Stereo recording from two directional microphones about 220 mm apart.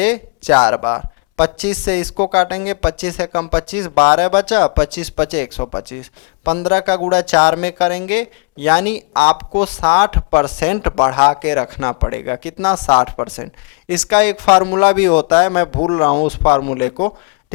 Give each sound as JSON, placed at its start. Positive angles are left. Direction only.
{"t": 0.0, "sound": "speech", "side_deg": 15}
{"t": 4.9, "sound": "speech", "side_deg": 10}
{"t": 5.5, "sound": "speech", "side_deg": 30}
{"t": 13.9, "sound": "speech", "side_deg": 10}
{"t": 14.4, "sound": "speech", "side_deg": 25}